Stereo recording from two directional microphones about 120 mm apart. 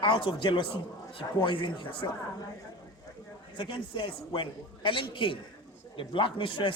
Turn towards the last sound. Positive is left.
turn(degrees=45)  # may be behind; listen again after turning